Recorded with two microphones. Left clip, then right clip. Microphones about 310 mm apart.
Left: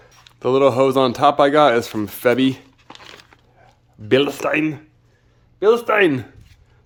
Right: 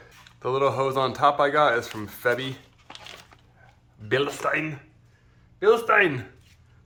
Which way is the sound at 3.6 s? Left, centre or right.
Left.